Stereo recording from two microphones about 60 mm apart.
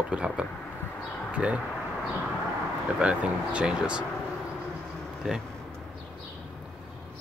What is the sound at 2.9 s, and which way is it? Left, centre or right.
Speech, centre.